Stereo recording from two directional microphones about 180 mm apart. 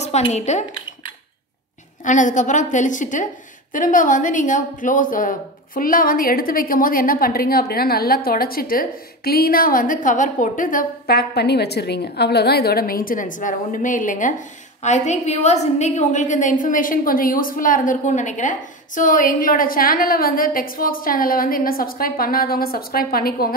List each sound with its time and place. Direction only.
0.0 s speech: 40° left (ahead or behind)
2.0 s a woman's voice: 45° left (ahead or behind)